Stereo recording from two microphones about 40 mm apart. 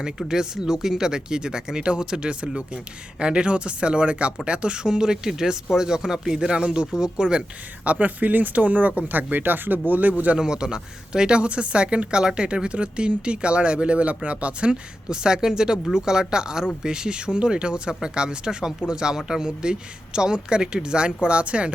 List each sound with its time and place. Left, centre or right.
0.0 s speech: centre
7.9 s speech: right
10.3 s speech: centre